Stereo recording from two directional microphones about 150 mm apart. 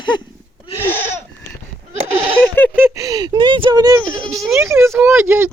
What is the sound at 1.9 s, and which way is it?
Bleat, 40° right (ahead or behind).